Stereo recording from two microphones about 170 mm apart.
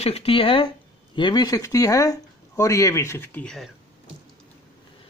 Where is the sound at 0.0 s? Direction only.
35° left (ahead or behind); by 3.7 s 5° left (ahead or behind).